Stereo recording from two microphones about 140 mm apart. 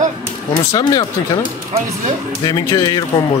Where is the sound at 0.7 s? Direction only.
25° left (ahead or behind).